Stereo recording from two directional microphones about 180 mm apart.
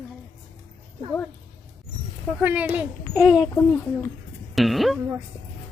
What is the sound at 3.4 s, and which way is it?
Speech, 10° left (ahead or behind).